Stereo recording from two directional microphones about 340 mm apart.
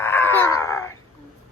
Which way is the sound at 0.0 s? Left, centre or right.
Centre.